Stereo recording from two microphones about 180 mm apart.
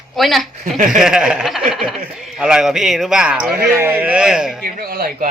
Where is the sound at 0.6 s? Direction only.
45° right (ahead or behind).